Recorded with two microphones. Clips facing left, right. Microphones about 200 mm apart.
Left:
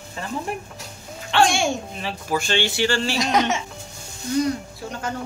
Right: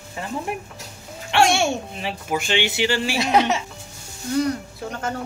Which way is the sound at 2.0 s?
20° right (ahead or behind).